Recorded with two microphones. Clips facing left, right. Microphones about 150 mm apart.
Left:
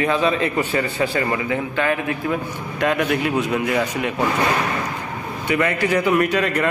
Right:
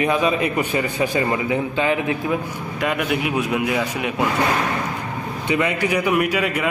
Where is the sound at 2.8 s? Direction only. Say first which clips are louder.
Left 2 dB; 5° right (ahead or behind).